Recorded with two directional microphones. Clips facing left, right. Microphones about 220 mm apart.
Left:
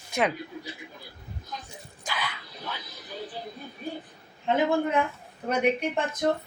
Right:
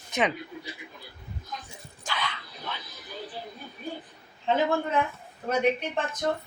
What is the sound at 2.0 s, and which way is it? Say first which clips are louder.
Dog: even; 5° left (ahead or behind).